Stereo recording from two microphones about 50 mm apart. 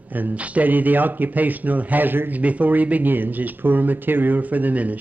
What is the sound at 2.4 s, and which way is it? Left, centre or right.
Speech, right.